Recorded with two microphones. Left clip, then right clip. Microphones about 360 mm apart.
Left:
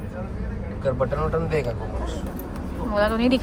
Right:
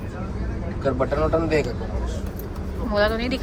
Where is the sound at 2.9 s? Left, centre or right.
Centre.